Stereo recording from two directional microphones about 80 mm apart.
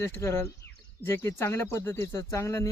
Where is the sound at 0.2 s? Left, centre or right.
Left.